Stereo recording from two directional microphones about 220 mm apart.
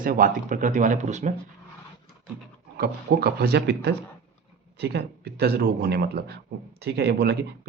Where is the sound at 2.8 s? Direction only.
45° right (ahead or behind).